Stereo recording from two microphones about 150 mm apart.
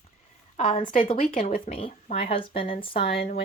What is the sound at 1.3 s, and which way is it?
Speech, 60° left (ahead or behind).